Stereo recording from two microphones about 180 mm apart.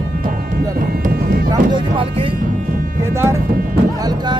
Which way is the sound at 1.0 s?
55° right (ahead or behind).